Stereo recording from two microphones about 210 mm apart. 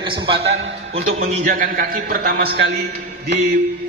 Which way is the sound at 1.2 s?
40° right (ahead or behind).